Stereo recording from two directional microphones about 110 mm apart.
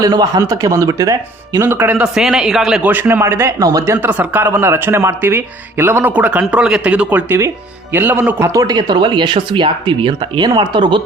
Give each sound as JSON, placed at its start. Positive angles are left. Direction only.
{"t": 0.0, "sound": "speech", "side_deg": -35}
{"t": 1.6, "sound": "a man's voice", "side_deg": -20}
{"t": 2.0, "sound": "a man's voice", "side_deg": -5}
{"t": 2.8, "sound": "a man's voice", "side_deg": -20}
{"t": 3.6, "sound": "speech", "side_deg": -30}
{"t": 4.0, "sound": "a man's voice", "side_deg": -15}
{"t": 8.5, "sound": "speech", "side_deg": -40}